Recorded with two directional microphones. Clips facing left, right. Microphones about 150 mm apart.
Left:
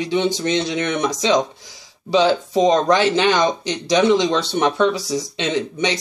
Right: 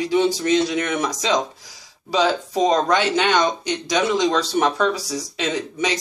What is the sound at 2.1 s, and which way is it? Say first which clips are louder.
Speech: left 4 dB; 25° left (ahead or behind).